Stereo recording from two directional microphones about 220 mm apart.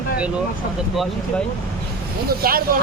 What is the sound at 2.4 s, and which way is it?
Speech, 40° right (ahead or behind).